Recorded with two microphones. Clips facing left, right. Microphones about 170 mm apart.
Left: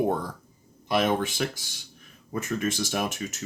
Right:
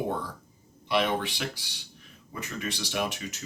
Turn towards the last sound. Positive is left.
turn(degrees=45)  # may be behind; listen again after turning